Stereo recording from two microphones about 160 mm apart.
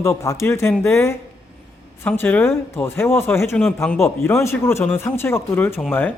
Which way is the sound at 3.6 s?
5° left (ahead or behind).